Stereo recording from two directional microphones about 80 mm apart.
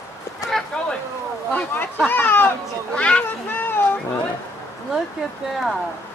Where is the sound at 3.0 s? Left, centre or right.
Centre.